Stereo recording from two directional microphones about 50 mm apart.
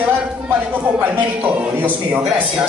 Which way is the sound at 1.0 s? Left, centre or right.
Right.